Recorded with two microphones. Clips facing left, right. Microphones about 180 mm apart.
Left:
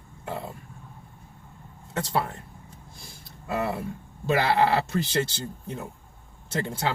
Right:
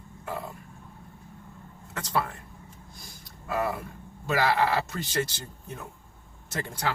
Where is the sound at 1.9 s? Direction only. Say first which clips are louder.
Left 2 dB; 25° left (ahead or behind).